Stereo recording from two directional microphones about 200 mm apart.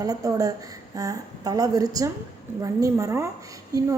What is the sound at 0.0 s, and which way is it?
A woman's voice, 15° right (ahead or behind).